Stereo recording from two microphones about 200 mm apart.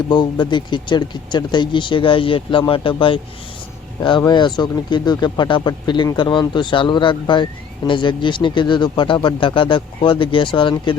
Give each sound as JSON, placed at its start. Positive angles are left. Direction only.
{"t": 0.1, "sound": "speech", "side_deg": 20}
{"t": 4.2, "sound": "speech", "side_deg": 20}